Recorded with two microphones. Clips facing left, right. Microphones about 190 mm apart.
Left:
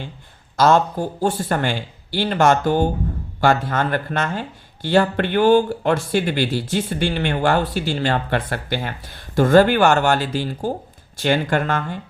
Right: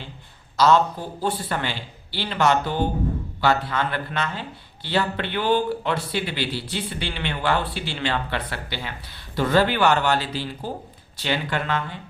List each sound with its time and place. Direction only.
0.5 s speech: 50° left (ahead or behind)